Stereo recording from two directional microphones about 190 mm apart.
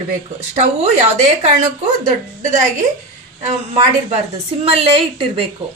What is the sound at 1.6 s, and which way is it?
A woman's voice, 40° right (ahead or behind).